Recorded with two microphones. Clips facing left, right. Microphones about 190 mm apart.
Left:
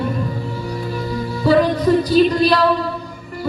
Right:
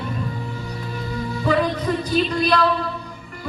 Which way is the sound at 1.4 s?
35° left (ahead or behind).